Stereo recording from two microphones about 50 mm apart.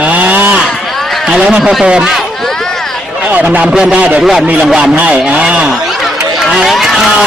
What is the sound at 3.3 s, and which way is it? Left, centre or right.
Speech, right.